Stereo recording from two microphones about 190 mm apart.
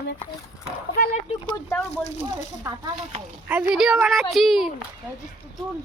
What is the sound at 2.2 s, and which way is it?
Speech, 20° right (ahead or behind).